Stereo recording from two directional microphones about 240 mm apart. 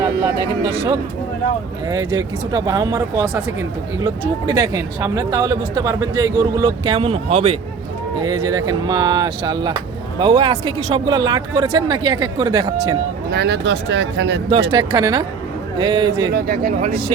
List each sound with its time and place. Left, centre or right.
0.6 s speech: centre
13.3 s speech: right
14.7 s speech: centre
16.3 s speech: right